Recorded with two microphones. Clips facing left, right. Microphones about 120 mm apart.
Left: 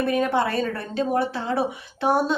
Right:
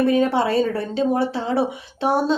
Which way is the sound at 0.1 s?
25° right (ahead or behind).